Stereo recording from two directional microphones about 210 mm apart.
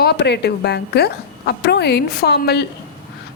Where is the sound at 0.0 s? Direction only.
55° left (ahead or behind).